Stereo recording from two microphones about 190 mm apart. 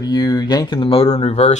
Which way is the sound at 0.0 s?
20° left (ahead or behind).